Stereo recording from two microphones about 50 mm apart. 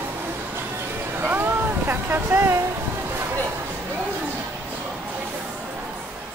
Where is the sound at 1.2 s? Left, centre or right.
Right.